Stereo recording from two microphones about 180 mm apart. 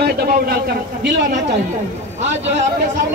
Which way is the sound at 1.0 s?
80° right.